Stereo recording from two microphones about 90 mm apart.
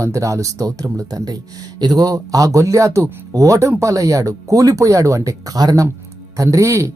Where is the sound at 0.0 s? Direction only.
35° right (ahead or behind).